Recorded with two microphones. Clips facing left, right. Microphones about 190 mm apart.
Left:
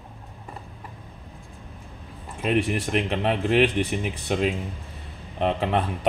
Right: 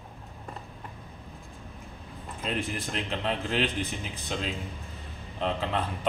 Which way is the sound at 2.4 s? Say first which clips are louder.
Left 9 dB; 70° left (ahead or behind).